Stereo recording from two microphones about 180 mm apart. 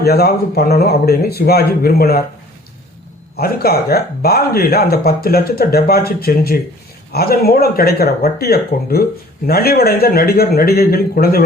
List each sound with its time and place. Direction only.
0.0 s speech: 60° left (ahead or behind)
3.3 s speech: 60° left (ahead or behind)